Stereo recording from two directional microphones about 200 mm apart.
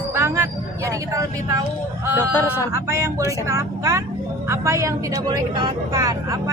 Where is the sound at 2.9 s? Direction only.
15° right (ahead or behind).